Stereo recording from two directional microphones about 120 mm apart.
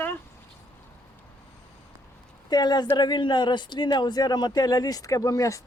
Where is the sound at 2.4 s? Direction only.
35° left (ahead or behind).